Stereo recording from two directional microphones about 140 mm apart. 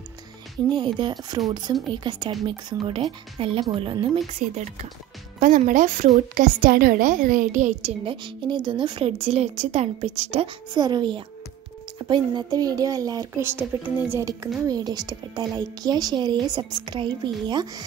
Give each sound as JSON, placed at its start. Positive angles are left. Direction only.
{"t": 0.7, "sound": "a woman's voice", "side_deg": -35}
{"t": 4.4, "sound": "speech", "side_deg": -55}
{"t": 5.4, "sound": "a woman's voice", "side_deg": -65}
{"t": 8.0, "sound": "a woman's voice", "side_deg": -40}
{"t": 14.7, "sound": "speech", "side_deg": -30}